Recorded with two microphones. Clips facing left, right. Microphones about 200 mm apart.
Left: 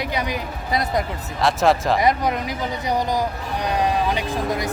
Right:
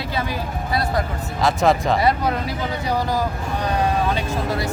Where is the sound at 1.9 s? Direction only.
15° left (ahead or behind).